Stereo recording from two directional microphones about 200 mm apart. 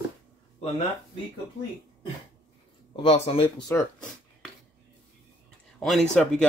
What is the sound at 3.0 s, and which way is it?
Speech, 30° left (ahead or behind).